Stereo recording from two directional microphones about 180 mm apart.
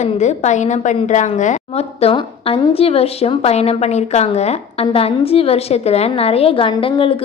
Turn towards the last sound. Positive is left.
turn(degrees=30)  # may be behind; listen again after turning